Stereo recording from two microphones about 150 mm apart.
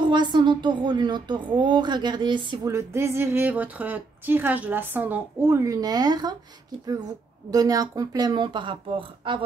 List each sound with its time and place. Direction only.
0.0 s a woman's voice: 30° right (ahead or behind)
2.7 s a woman's voice: 15° right (ahead or behind)
7.5 s speech: 25° right (ahead or behind)